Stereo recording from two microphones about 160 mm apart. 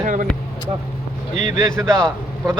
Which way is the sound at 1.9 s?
5° left (ahead or behind).